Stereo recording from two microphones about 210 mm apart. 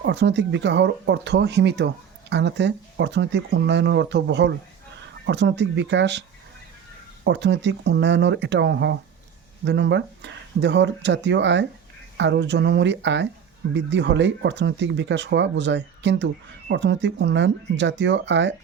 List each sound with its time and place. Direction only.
0.0 s speech: 55° right (ahead or behind)
7.3 s speech: 60° right (ahead or behind)